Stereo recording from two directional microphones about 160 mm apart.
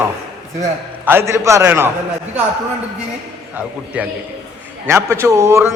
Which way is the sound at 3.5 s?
10° right (ahead or behind).